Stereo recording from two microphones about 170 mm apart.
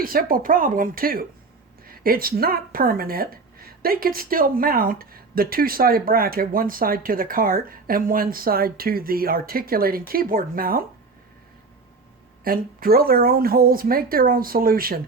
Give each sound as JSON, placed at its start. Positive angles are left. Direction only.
{"t": 0.0, "sound": "speech", "side_deg": -60}
{"t": 12.5, "sound": "speech", "side_deg": -60}